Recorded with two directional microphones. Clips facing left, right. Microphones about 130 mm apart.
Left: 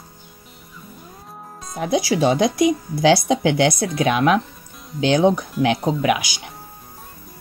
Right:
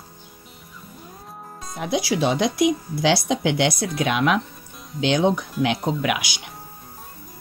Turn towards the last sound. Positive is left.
turn(degrees=45)  # may be behind; listen again after turning